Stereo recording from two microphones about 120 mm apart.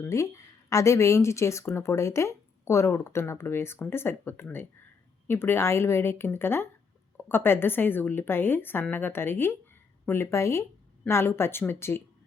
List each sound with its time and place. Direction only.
0.0 s a woman's voice: 25° left (ahead or behind)